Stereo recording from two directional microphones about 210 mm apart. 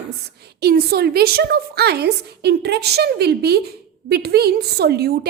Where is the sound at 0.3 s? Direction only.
50° right (ahead or behind).